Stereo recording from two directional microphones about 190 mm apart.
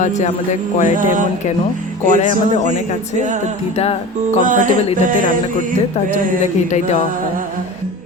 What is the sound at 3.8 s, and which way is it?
Speech, 35° left (ahead or behind).